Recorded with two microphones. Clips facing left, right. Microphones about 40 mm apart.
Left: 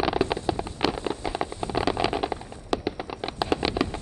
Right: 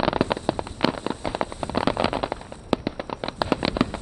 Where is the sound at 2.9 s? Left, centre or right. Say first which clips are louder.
Right 1 dB; centre.